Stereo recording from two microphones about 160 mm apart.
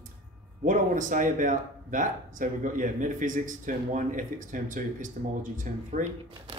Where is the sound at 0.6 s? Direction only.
55° right (ahead or behind).